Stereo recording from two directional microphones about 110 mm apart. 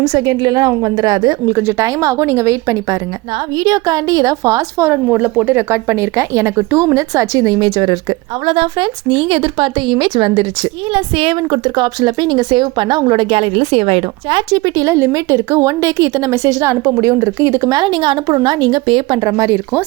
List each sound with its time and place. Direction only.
0.1 s a woman's voice: 40° right (ahead or behind)
5.0 s a woman's voice: 15° right (ahead or behind); by 7.9 s 35° right (ahead or behind)
8.4 s a woman's voice: 50° right (ahead or behind)
13.2 s a woman's voice: 60° right (ahead or behind); by 17.7 s 25° right (ahead or behind)
17.7 s a woman's voice: 45° right (ahead or behind)
19.2 s a woman's voice: 30° right (ahead or behind)